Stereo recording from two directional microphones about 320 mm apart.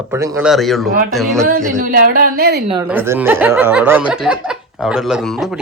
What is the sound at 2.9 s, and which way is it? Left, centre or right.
Speech, centre.